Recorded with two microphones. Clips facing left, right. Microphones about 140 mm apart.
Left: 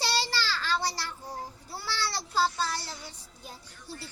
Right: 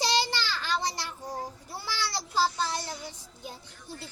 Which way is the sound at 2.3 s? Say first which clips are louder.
Right 1 dB; 20° right (ahead or behind).